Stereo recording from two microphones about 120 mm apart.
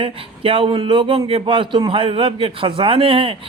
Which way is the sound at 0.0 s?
50° right (ahead or behind).